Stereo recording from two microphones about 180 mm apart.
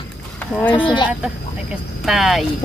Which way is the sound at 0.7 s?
25° left (ahead or behind).